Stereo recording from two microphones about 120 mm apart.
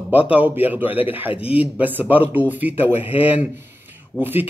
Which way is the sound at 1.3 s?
50° left (ahead or behind).